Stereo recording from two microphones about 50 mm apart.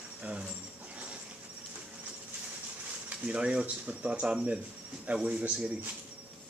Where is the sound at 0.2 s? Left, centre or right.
Right.